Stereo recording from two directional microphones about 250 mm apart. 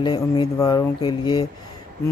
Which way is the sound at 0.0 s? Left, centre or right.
Centre.